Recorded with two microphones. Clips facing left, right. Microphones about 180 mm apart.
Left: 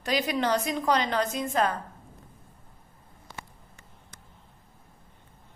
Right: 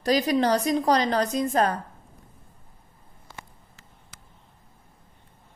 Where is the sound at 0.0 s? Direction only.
40° right (ahead or behind).